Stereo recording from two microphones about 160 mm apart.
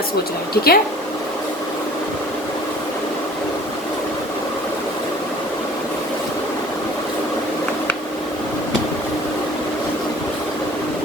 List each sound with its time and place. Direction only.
0.5 s speech: 75° left (ahead or behind)